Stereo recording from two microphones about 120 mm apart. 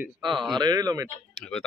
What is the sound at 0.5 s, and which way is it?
Speech, 35° right (ahead or behind).